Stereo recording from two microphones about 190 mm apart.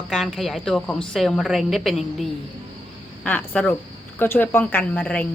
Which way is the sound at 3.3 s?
10° left (ahead or behind).